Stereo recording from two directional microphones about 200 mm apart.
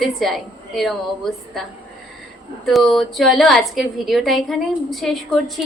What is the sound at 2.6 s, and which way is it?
A woman's voice, centre (ahead or behind).